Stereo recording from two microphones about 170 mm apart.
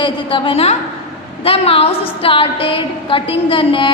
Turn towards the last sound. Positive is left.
turn(degrees=30)  # may be behind; listen again after turning